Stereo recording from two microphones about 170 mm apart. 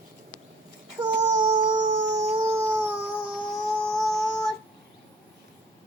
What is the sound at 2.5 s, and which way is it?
Dog, 15° right (ahead or behind).